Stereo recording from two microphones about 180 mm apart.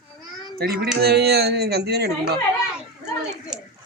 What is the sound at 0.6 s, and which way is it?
Speech, 60° right (ahead or behind).